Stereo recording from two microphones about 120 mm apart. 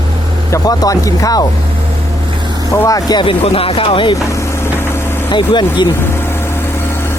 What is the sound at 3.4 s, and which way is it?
Speech, 55° left (ahead or behind).